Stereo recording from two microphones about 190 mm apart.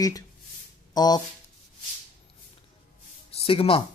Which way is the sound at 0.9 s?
20° left (ahead or behind).